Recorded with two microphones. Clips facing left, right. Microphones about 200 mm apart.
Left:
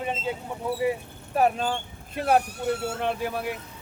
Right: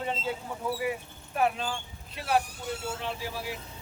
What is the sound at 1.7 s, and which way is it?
Speech, 55° left (ahead or behind).